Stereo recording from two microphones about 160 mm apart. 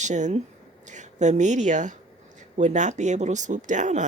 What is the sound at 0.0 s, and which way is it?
A woman's voice, 50° right (ahead or behind).